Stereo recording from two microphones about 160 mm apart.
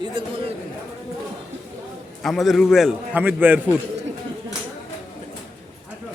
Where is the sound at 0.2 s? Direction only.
30° right (ahead or behind).